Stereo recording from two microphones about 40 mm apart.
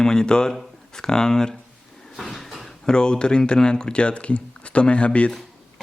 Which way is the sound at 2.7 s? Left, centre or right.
Centre.